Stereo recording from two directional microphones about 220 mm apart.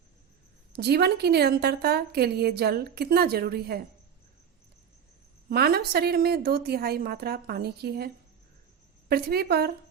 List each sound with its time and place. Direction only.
0.7 s a woman's voice: 45° right (ahead or behind)
5.5 s a woman's voice: 45° right (ahead or behind)